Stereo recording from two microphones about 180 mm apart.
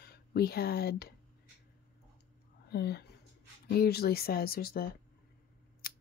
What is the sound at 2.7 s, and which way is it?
Speech, 65° left (ahead or behind).